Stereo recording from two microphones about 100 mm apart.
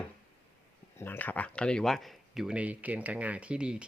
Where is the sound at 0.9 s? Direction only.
20° left (ahead or behind); by 3.8 s 10° right (ahead or behind).